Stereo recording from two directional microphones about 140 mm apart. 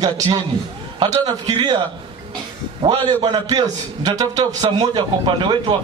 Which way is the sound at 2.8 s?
30° right (ahead or behind).